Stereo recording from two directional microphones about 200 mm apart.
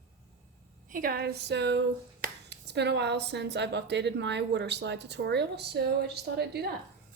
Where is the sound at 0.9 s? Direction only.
45° right (ahead or behind).